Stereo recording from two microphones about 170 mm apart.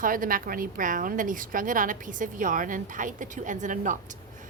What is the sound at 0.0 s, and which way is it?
A woman's voice, 55° right (ahead or behind).